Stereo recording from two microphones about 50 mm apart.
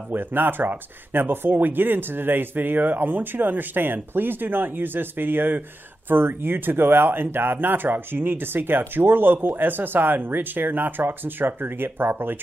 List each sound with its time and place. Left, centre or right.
0.1 s speech: right